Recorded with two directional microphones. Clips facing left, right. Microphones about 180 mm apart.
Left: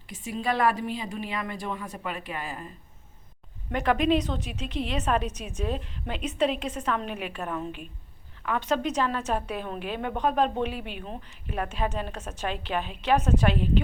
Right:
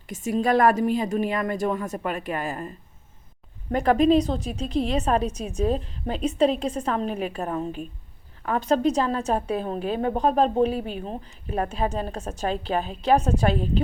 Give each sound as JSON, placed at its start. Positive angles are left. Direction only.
{"t": 0.1, "sound": "a woman's voice", "side_deg": -45}
{"t": 3.7, "sound": "a woman's voice", "side_deg": -35}